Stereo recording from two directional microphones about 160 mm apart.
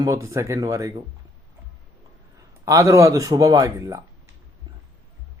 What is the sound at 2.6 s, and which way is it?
Speech, 20° right (ahead or behind).